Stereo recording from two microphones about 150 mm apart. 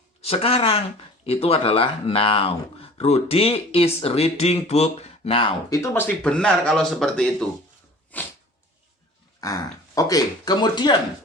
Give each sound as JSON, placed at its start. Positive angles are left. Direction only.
{"t": 0.2, "sound": "speech", "side_deg": 40}
{"t": 5.7, "sound": "speech", "side_deg": 15}
{"t": 9.4, "sound": "speech", "side_deg": 25}